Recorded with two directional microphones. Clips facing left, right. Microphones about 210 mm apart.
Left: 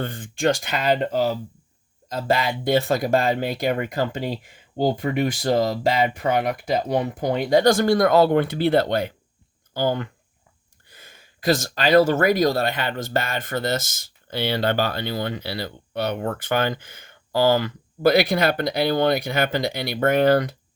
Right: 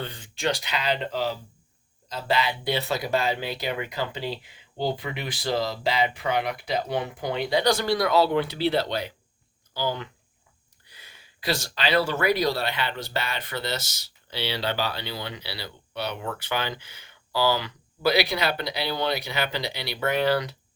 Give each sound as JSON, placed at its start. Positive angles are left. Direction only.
{"t": 0.0, "sound": "speech", "side_deg": 50}